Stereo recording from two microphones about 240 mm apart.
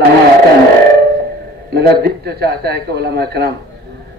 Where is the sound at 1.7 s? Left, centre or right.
Right.